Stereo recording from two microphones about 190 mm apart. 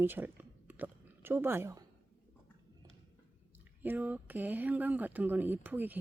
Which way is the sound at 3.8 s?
10° right (ahead or behind).